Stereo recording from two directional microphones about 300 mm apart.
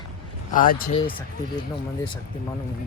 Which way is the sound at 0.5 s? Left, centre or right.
Left.